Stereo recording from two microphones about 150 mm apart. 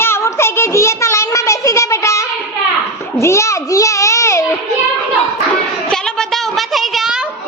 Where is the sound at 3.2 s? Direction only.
20° left (ahead or behind).